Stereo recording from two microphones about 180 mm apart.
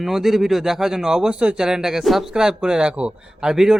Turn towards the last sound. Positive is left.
turn(degrees=-5)  # may be behind; listen again after turning